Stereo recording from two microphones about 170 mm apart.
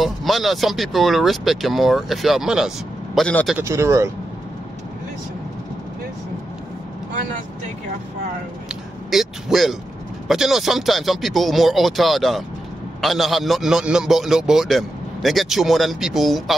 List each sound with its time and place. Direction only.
0.0 s a man's voice: centre (ahead or behind)
3.5 s speech: 15° right (ahead or behind)
9.1 s a man's voice: centre (ahead or behind)